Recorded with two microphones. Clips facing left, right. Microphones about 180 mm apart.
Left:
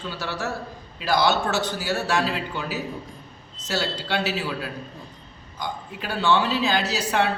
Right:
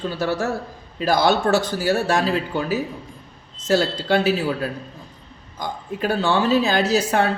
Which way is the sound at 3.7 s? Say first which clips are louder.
Right 8 dB; 50° right (ahead or behind).